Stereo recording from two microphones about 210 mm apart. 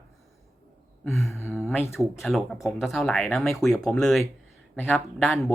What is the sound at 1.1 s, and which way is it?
Speech, centre (ahead or behind).